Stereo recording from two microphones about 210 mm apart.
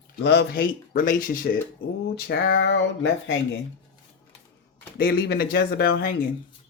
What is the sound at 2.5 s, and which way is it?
Speech, 60° left (ahead or behind).